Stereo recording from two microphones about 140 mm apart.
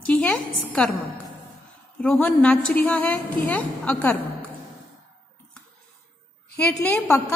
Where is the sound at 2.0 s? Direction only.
5° left (ahead or behind).